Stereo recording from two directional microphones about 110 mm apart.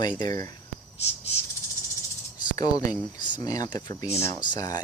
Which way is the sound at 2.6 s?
35° left (ahead or behind).